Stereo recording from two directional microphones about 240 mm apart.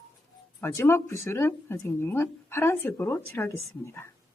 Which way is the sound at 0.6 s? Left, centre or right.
Centre.